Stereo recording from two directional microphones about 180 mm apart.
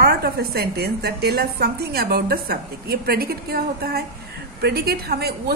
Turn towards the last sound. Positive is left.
turn(degrees=-60)  # may be behind; listen again after turning